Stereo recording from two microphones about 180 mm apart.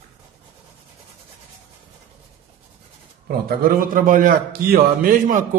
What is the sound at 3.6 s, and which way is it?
A man's voice, 55° right (ahead or behind).